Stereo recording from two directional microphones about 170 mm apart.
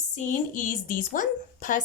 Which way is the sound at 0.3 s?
50° left (ahead or behind).